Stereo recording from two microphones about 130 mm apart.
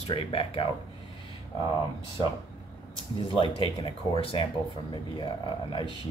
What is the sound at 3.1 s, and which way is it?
Speech, 40° left (ahead or behind).